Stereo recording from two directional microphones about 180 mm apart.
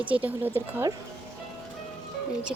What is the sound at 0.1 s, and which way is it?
Speech, 10° right (ahead or behind).